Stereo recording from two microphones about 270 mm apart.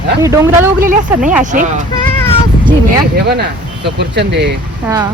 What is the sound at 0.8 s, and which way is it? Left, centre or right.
Speech, right.